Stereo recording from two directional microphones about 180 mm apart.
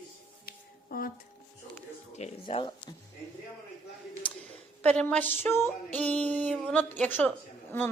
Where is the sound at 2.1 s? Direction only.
35° left (ahead or behind).